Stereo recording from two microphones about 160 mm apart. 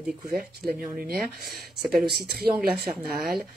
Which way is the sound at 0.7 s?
70° right (ahead or behind).